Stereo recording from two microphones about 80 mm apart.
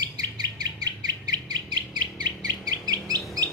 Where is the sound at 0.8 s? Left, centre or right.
Right.